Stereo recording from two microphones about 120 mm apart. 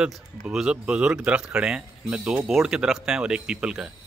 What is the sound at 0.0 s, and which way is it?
Speech, 5° right (ahead or behind).